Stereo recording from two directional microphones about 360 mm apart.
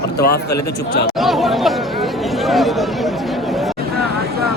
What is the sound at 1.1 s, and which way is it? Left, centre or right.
Chatter, centre.